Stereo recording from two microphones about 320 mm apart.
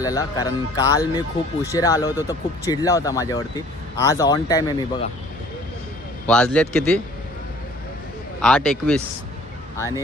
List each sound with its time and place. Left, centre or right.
0.0 s speech: centre
6.2 s a man's voice: centre
8.4 s a man's voice: centre